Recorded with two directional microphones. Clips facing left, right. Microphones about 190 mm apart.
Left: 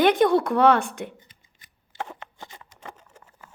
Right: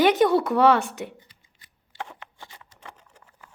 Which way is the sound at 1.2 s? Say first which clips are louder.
Left 1 dB; 20° left (ahead or behind).